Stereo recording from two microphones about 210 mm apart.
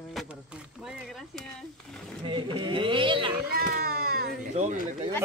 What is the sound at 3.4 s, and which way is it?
Speech, 45° right (ahead or behind).